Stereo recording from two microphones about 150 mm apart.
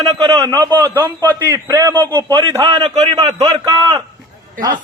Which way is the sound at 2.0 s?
30° right (ahead or behind).